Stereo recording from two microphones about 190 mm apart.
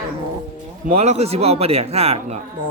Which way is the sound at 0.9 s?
35° right (ahead or behind).